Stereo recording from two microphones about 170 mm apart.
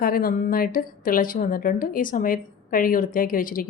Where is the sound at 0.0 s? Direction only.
55° left (ahead or behind).